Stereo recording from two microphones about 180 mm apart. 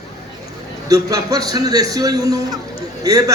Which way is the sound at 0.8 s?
20° right (ahead or behind).